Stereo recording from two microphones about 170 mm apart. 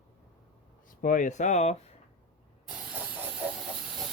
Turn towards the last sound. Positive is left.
turn(degrees=-5)  # may be behind; listen again after turning